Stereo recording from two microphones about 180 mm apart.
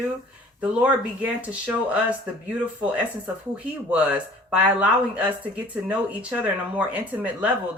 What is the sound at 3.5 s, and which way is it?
Speech, 5° right (ahead or behind).